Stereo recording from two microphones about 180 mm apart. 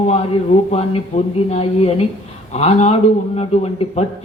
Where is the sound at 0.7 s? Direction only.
35° left (ahead or behind).